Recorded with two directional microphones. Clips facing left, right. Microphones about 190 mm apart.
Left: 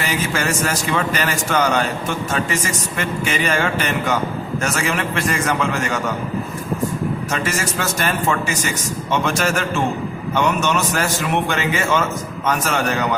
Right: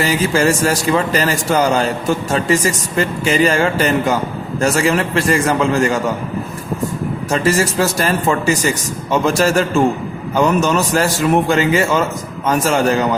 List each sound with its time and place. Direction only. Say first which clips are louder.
0.0 s a man's voice: right 7 dB; 30° right (ahead or behind)
7.3 s a man's voice: right 7 dB; 30° right (ahead or behind)